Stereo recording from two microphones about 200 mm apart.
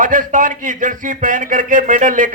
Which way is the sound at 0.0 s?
40° right (ahead or behind).